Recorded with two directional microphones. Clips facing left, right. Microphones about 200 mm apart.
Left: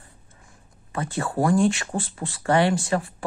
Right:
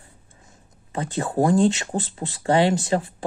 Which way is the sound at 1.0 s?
20° right (ahead or behind).